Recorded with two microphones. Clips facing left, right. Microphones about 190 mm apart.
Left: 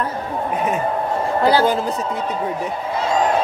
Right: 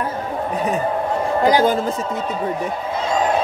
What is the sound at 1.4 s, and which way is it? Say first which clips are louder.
Speech: even; 15° right (ahead or behind).